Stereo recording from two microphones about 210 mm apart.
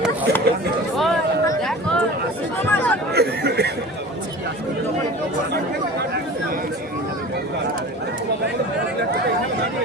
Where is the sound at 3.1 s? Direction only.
50° right (ahead or behind).